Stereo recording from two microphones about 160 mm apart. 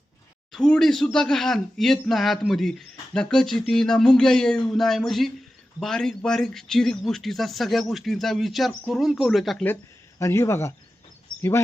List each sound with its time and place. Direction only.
0.5 s speech: 5° left (ahead or behind)
10.2 s speech: 15° left (ahead or behind)